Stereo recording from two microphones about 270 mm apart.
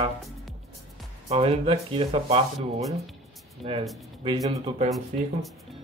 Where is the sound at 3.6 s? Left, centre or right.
Right.